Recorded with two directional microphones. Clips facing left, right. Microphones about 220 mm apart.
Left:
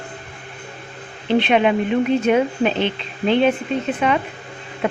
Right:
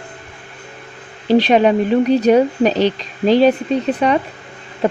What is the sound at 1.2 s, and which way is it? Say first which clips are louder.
Speech: right 4 dB; 35° right (ahead or behind).